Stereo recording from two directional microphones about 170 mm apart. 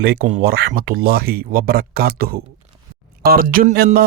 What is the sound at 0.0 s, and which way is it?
Speech, 65° right (ahead or behind).